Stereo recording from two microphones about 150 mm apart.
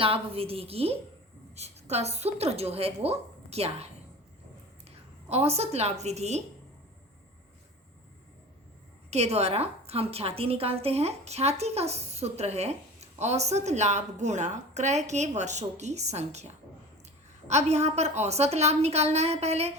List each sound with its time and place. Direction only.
0.0 s a woman's voice: 40° right (ahead or behind)
5.3 s a woman's voice: 45° right (ahead or behind)
9.0 s a woman's voice: 45° right (ahead or behind)
17.5 s a woman's voice: 45° right (ahead or behind)